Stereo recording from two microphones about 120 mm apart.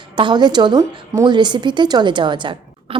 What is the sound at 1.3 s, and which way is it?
A woman's voice, 40° right (ahead or behind).